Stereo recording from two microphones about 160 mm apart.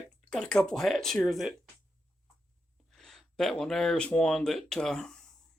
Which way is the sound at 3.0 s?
Centre (ahead or behind).